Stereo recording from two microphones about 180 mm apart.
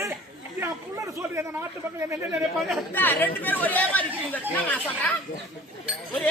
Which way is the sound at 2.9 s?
10° left (ahead or behind).